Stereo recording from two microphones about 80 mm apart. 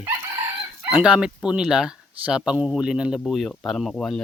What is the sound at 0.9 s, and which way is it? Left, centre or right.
Speech, centre.